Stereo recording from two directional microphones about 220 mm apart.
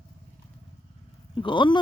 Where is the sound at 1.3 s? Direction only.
20° left (ahead or behind).